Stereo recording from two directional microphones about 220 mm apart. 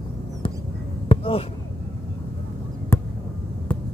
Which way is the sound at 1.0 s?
25° left (ahead or behind).